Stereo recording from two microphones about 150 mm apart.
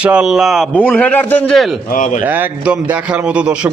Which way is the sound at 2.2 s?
10° right (ahead or behind).